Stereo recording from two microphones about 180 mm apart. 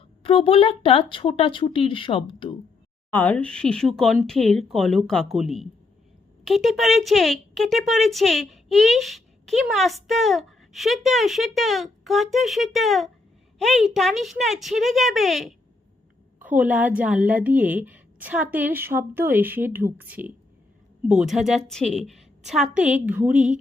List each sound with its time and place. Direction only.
0.2 s speech: 30° left (ahead or behind)
3.1 s a woman's voice: 10° left (ahead or behind); by 23.6 s 5° right (ahead or behind)